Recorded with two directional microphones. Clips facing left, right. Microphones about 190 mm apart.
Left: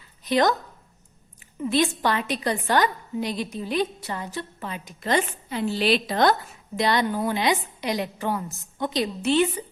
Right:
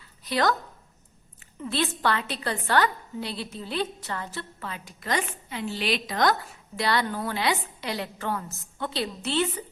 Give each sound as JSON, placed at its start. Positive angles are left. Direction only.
{"t": 0.3, "sound": "speech", "side_deg": 20}
{"t": 1.6, "sound": "a woman's voice", "side_deg": 15}
{"t": 6.7, "sound": "a woman's voice", "side_deg": 20}